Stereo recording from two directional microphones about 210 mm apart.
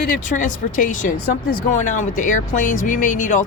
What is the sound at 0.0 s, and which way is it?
Speech, 40° left (ahead or behind).